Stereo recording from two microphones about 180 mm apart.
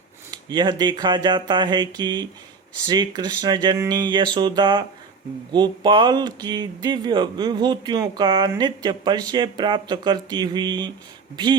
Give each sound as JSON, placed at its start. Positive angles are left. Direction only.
{"t": 0.3, "sound": "speech", "side_deg": -25}